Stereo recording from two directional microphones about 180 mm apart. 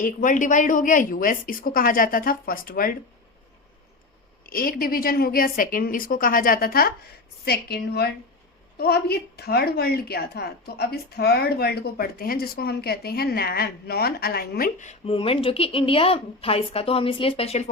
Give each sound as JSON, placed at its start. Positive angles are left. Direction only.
{"t": 0.0, "sound": "a woman's voice", "side_deg": 45}
{"t": 4.4, "sound": "a woman's voice", "side_deg": 55}
{"t": 14.8, "sound": "a woman's voice", "side_deg": 35}